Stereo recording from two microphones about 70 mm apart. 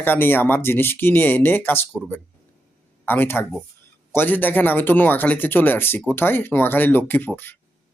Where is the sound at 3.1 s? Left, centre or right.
Left.